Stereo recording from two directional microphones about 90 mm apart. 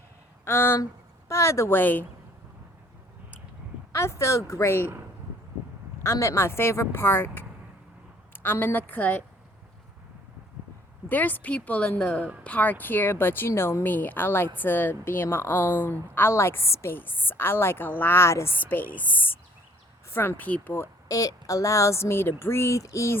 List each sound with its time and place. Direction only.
0.4 s a woman's voice: 25° left (ahead or behind)
3.9 s speech: 30° left (ahead or behind)
6.0 s a woman's voice: 30° left (ahead or behind)
11.1 s a woman's voice: 20° left (ahead or behind)
21.1 s speech: 40° left (ahead or behind)